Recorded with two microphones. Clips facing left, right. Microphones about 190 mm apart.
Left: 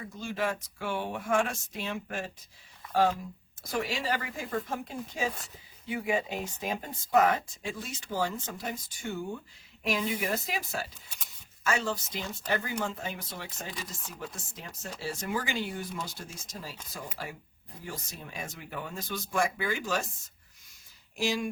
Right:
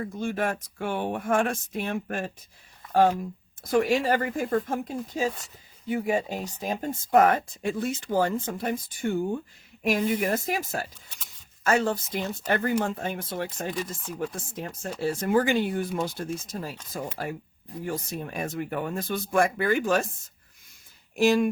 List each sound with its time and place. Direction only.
0.0 s speech: 55° right (ahead or behind)